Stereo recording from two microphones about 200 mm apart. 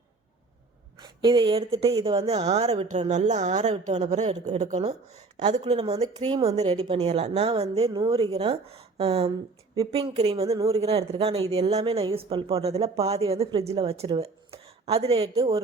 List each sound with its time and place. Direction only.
0.9 s a woman's voice: 20° right (ahead or behind)